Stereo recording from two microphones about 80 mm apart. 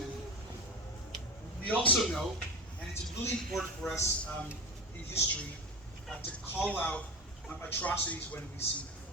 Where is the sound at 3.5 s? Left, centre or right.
Centre.